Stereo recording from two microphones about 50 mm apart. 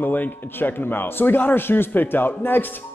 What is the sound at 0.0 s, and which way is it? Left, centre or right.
A man's voice, left.